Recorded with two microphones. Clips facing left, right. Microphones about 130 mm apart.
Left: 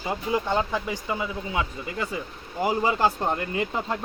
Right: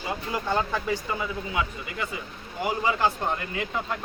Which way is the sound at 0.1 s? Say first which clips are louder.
Left 3 dB; 20° left (ahead or behind).